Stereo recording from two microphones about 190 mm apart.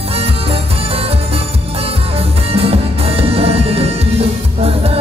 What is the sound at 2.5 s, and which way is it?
Music, 30° right (ahead or behind).